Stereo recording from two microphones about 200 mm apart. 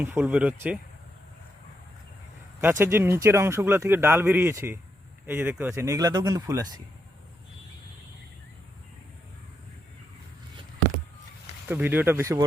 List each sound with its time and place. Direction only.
0.0 s speech: 5° right (ahead or behind)
2.6 s speech: 10° right (ahead or behind)
11.7 s speech: 10° right (ahead or behind)